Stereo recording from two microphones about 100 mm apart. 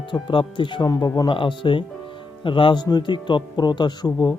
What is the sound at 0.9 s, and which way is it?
Speech, 40° left (ahead or behind).